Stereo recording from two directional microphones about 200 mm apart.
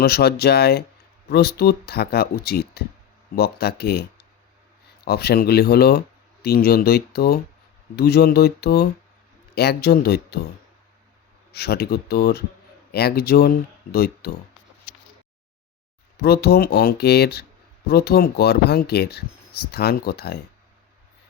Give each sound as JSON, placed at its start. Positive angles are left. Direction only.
{"t": 0.0, "sound": "speech", "side_deg": 50}
{"t": 11.5, "sound": "speech", "side_deg": 50}
{"t": 16.1, "sound": "speech", "side_deg": 50}